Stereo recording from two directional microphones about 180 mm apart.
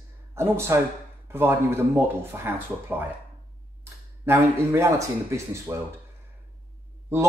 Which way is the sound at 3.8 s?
15° right (ahead or behind).